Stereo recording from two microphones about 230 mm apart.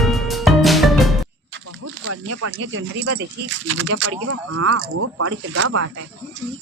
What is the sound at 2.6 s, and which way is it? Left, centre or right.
Speech, right.